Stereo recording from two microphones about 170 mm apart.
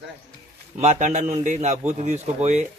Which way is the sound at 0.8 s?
45° right (ahead or behind).